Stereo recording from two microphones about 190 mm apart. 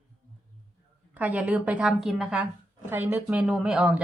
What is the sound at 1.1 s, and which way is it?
A woman's voice, 10° right (ahead or behind).